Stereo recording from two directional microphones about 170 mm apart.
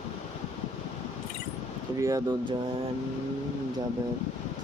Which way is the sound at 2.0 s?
20° right (ahead or behind).